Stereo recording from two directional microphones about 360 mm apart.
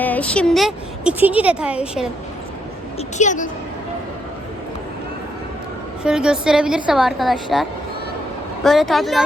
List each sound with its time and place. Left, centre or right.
0.0 s speech: centre
3.2 s speech: left
6.0 s speech: centre